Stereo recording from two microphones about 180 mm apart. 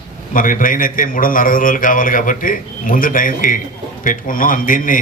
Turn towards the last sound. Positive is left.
turn(degrees=50)  # may be behind; listen again after turning